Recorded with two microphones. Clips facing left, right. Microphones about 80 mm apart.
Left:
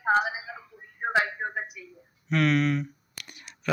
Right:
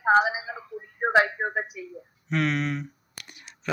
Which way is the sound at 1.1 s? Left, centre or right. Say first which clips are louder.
Right 5 dB; right.